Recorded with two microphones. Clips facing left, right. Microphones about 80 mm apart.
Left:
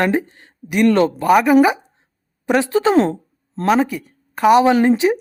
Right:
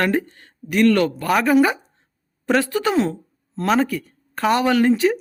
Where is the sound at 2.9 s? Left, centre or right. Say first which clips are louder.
Left 5 dB; left.